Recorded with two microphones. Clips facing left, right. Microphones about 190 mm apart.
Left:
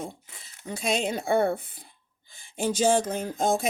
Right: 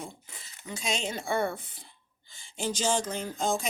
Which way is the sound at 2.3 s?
55° left (ahead or behind).